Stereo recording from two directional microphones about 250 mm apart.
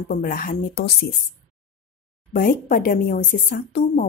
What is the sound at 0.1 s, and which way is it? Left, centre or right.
Speech, left.